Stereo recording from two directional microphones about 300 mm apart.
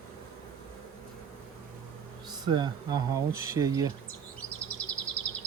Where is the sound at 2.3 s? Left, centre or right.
Centre.